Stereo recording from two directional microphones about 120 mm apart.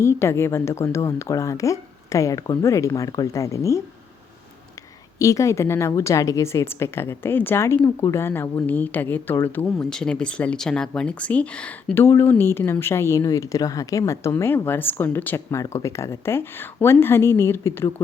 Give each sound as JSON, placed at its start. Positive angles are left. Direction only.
{"t": 0.0, "sound": "speech", "side_deg": 20}
{"t": 5.2, "sound": "speech", "side_deg": 25}
{"t": 9.6, "sound": "speech", "side_deg": 5}
{"t": 12.0, "sound": "speech", "side_deg": 20}